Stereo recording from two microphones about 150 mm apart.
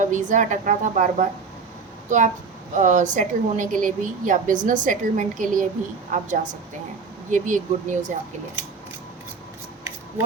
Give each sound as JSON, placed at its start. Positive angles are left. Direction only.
{"t": 0.0, "sound": "a woman's voice", "side_deg": -55}